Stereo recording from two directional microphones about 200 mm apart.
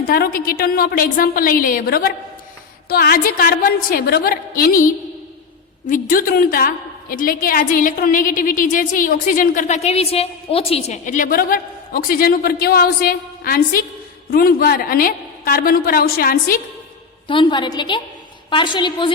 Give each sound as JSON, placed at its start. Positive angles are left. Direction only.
{"t": 0.1, "sound": "a woman's voice", "side_deg": 45}
{"t": 17.2, "sound": "a woman's voice", "side_deg": 25}